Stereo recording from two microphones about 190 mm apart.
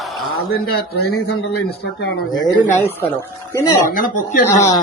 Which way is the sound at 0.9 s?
60° left (ahead or behind).